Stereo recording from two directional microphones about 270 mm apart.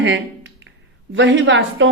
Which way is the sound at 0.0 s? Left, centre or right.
Right.